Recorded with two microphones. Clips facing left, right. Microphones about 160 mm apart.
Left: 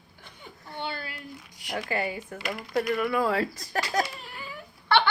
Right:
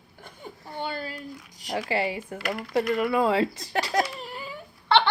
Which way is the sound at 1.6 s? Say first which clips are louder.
Right 3 dB; 35° right (ahead or behind).